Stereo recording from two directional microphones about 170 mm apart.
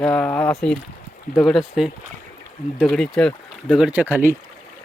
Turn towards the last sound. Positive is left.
turn(degrees=-10)  # may be behind; listen again after turning